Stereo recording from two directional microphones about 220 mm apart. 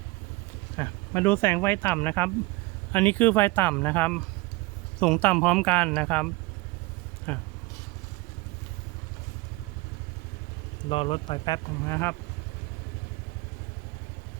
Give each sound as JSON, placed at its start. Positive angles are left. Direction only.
{"t": 0.8, "sound": "speech", "side_deg": 10}
{"t": 10.8, "sound": "speech", "side_deg": 25}